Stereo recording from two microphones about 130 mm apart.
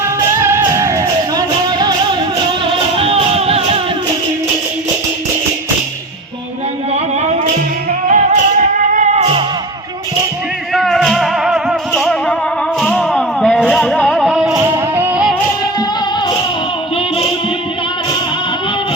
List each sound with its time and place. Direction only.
0.0 s music: 20° right (ahead or behind)
2.6 s music: 45° right (ahead or behind)
8.0 s music: 85° right
10.8 s music: centre (ahead or behind)
14.3 s music: 5° right (ahead or behind)